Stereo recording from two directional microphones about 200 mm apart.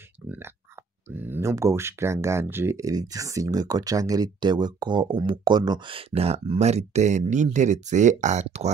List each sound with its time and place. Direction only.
1.1 s speech: 10° right (ahead or behind); by 8.7 s 35° right (ahead or behind)